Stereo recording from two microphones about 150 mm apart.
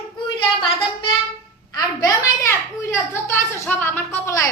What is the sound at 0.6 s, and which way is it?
A woman's voice, 30° left (ahead or behind).